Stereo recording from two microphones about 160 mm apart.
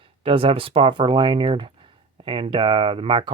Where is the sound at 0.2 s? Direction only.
35° right (ahead or behind).